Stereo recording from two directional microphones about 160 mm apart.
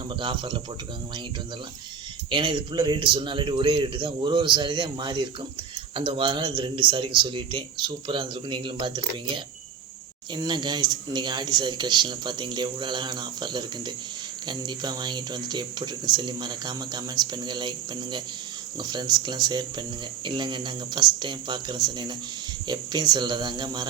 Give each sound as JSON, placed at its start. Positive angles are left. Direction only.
{"t": 0.2, "sound": "speech", "side_deg": -30}
{"t": 2.3, "sound": "speech", "side_deg": -30}